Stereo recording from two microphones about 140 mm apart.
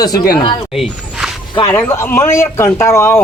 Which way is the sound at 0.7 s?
5° right (ahead or behind).